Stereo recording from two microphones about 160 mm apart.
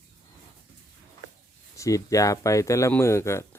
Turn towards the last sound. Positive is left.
turn(degrees=15)  # may be behind; listen again after turning